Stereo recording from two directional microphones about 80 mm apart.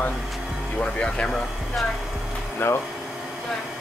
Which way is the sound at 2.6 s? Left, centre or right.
Left.